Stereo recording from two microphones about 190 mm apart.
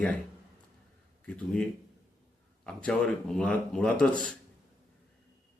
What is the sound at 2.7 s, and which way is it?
A man's voice, 5° left (ahead or behind).